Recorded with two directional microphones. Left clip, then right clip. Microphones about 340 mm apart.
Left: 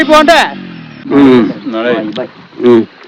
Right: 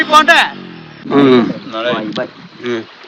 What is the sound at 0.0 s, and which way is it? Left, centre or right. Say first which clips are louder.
Speech: left 3 dB; centre.